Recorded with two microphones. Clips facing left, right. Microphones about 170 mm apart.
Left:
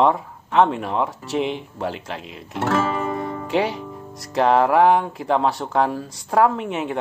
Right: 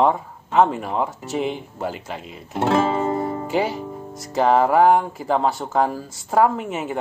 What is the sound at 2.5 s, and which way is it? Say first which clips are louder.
Music: right 3 dB; 20° right (ahead or behind).